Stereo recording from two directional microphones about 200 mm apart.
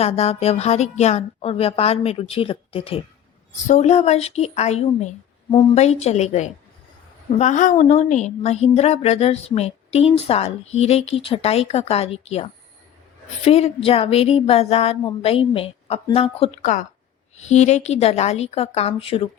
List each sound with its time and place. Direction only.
0.0 s a woman's voice: 30° left (ahead or behind)